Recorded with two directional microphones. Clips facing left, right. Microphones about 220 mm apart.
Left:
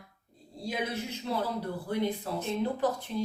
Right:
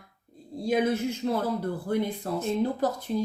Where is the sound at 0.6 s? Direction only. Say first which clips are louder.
Right 9 dB; 50° right (ahead or behind).